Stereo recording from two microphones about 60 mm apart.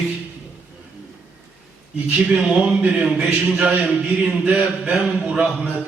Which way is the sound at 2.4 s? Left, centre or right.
Centre.